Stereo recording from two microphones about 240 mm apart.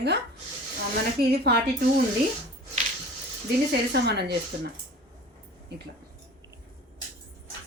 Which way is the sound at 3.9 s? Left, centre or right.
Right.